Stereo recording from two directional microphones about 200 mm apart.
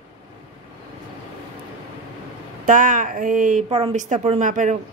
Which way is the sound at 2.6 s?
40° right (ahead or behind).